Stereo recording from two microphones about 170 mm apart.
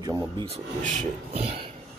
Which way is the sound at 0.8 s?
45° right (ahead or behind).